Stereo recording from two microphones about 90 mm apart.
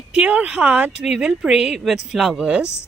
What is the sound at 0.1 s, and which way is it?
Speech, 15° right (ahead or behind).